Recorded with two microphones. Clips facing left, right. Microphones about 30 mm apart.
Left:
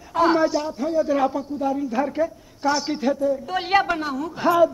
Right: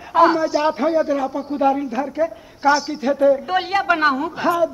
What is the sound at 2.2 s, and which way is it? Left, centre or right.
Speech, centre.